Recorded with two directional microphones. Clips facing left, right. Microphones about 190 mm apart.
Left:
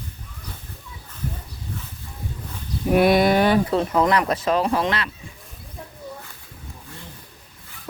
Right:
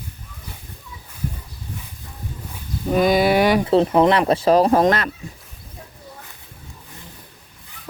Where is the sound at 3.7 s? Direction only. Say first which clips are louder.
Right 4 dB; 25° right (ahead or behind); by 5.1 s 45° right (ahead or behind).